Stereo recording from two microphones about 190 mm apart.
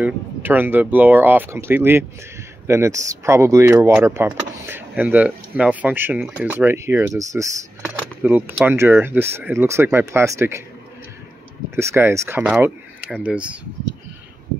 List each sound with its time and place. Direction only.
0.0 s speech: 10° right (ahead or behind)
11.7 s speech: 15° right (ahead or behind)